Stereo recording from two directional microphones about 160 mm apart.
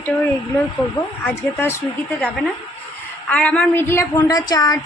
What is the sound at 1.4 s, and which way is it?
Speech, 15° left (ahead or behind).